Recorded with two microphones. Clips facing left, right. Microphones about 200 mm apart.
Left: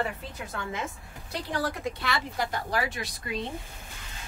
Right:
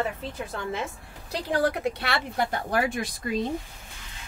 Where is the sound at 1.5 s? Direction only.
60° right (ahead or behind).